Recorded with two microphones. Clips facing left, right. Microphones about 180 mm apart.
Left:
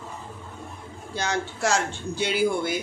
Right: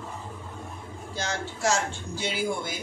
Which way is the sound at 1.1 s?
60° left (ahead or behind).